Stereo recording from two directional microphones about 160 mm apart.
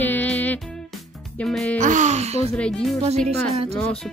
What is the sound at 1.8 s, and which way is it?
Speech, 50° right (ahead or behind).